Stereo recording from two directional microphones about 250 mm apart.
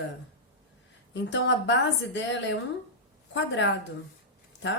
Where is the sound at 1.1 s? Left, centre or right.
Left.